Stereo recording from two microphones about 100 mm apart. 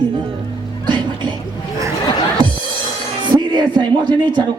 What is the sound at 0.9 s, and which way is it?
Music, 50° right (ahead or behind).